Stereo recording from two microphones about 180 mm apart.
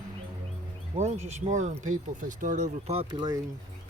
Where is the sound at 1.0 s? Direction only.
40° right (ahead or behind).